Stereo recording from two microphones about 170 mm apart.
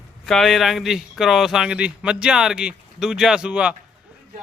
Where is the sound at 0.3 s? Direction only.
Centre (ahead or behind).